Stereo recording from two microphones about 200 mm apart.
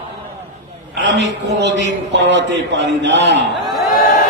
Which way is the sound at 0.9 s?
60° right (ahead or behind).